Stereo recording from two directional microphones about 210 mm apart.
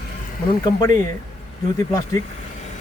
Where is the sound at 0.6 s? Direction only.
20° left (ahead or behind).